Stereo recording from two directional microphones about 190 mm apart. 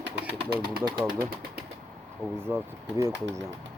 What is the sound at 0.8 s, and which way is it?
Speech, 25° right (ahead or behind).